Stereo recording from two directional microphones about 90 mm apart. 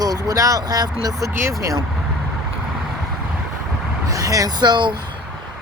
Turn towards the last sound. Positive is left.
turn(degrees=-55)  # may be behind; listen again after turning